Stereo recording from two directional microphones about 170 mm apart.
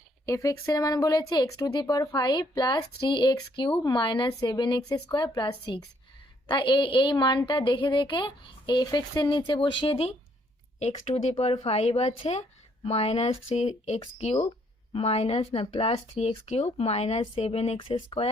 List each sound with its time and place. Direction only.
0.3 s a woman's voice: 20° left (ahead or behind); by 18.3 s 35° left (ahead or behind)